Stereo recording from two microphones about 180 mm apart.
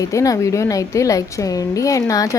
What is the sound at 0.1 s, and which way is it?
A woman's voice, 15° left (ahead or behind).